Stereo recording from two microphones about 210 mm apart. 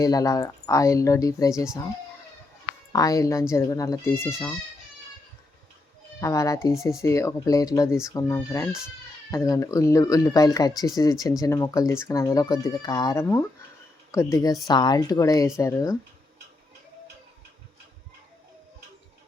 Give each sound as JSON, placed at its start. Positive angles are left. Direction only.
{"t": 0.0, "sound": "speech", "side_deg": 15}
{"t": 2.9, "sound": "speech", "side_deg": 15}
{"t": 6.1, "sound": "speech", "side_deg": 15}